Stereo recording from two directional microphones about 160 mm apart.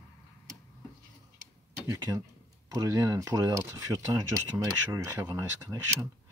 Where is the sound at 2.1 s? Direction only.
10° right (ahead or behind).